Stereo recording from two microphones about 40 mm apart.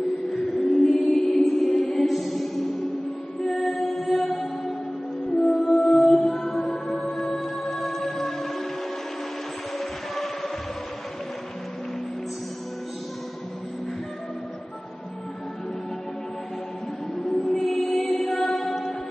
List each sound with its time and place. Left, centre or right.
0.3 s music: centre
9.8 s music: centre
17.5 s music: centre